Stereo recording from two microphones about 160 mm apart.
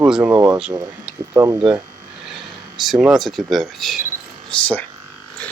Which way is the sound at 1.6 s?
5° right (ahead or behind).